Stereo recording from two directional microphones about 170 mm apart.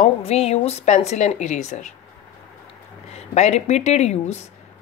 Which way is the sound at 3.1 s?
40° left (ahead or behind).